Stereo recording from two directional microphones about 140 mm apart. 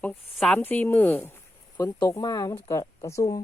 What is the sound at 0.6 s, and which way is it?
Speech, 15° left (ahead or behind).